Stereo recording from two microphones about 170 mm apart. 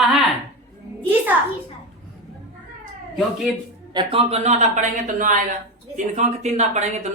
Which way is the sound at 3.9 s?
35° right (ahead or behind).